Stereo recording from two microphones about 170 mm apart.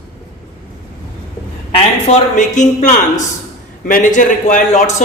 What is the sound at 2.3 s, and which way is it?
Speech, 45° left (ahead or behind).